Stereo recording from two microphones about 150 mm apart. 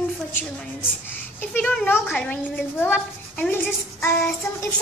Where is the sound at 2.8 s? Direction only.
10° left (ahead or behind).